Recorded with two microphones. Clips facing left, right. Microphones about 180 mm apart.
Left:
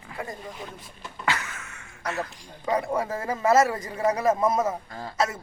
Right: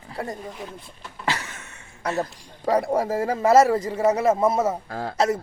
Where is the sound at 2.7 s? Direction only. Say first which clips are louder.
Right 4 dB; 35° right (ahead or behind).